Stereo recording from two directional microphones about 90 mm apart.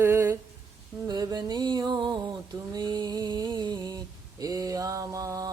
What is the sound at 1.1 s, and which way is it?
Music, 50° right (ahead or behind).